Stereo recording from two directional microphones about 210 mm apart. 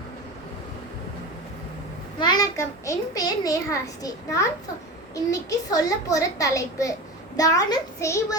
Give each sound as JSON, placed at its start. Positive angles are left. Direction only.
{"t": 2.1, "sound": "a child's voice", "side_deg": 20}